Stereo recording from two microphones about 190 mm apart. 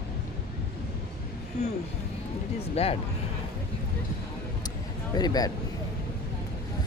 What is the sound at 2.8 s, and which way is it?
Speech, 30° left (ahead or behind).